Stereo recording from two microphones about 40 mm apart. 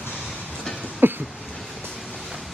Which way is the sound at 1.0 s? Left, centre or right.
Right.